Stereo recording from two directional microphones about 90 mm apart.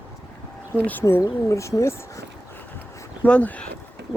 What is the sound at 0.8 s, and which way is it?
Speech, 20° left (ahead or behind).